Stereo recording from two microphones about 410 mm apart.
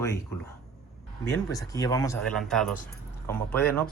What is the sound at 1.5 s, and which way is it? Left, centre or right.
Speech, centre.